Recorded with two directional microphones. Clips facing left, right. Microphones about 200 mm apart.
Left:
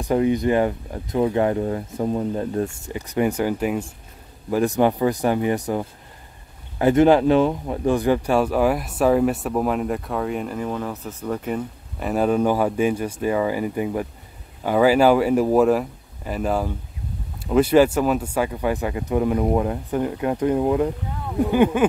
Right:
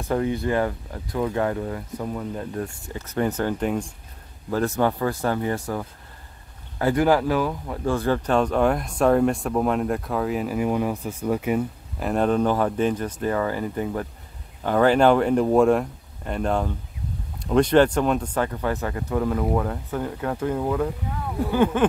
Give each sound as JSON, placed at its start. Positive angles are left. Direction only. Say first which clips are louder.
{"t": 0.0, "sound": "speech", "louder": "left 5 dB", "side_deg": 15}
{"t": 2.9, "sound": "speech", "louder": "left 1 dB", "side_deg": 15}
{"t": 12.1, "sound": "speech", "louder": "left 2 dB", "side_deg": 5}